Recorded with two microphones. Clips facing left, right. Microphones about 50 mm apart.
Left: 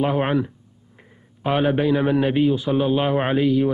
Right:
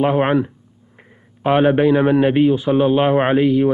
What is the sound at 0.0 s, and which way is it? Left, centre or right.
A man's voice, right.